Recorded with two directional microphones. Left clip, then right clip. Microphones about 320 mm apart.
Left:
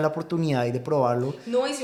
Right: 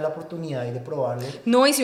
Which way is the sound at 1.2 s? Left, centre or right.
Right.